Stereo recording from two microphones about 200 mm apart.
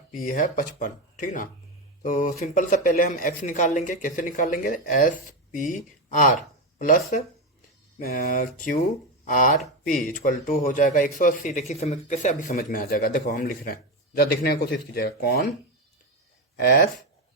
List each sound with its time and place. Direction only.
0.1 s speech: 45° left (ahead or behind)
16.6 s speech: 50° left (ahead or behind)